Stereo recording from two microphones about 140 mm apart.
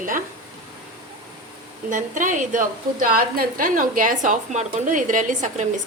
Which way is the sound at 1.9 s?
65° right (ahead or behind).